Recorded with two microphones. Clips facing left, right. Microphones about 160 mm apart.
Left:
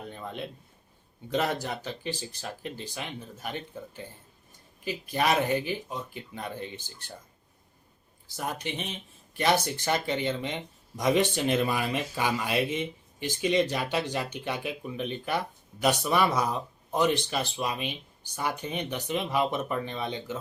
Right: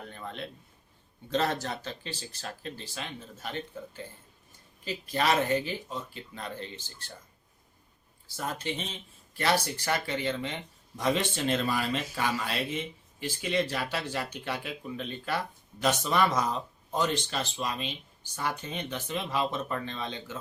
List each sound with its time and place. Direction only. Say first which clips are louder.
0.1 s a sound: left 2 dB; 15° left (ahead or behind)
1.3 s speech: left 1 dB; 15° left (ahead or behind)
4.9 s speech: left 1 dB; 15° left (ahead or behind)
8.3 s speech: even; 15° left (ahead or behind)